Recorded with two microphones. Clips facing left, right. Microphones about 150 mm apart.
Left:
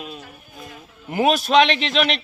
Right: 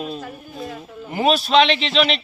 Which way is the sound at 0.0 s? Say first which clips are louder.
Right 7 dB; 35° right (ahead or behind).